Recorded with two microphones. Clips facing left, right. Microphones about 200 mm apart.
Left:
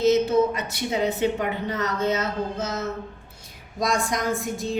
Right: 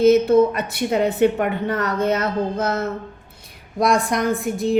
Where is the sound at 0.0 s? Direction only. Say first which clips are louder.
Right 6 dB; 55° right (ahead or behind).